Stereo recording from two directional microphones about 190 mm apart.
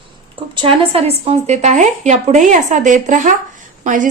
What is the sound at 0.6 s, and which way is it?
A woman's voice, 30° right (ahead or behind).